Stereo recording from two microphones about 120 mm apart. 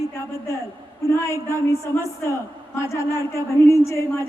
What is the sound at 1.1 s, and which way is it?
A man's voice, 25° left (ahead or behind).